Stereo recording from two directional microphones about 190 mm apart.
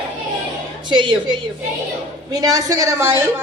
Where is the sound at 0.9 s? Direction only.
25° right (ahead or behind).